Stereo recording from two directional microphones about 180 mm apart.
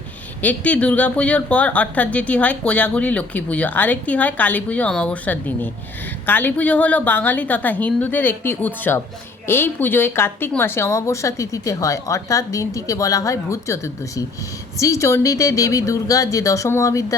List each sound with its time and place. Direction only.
0.4 s speech: 10° left (ahead or behind)